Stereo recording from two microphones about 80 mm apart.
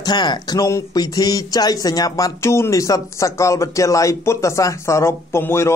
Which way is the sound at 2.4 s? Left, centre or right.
Left.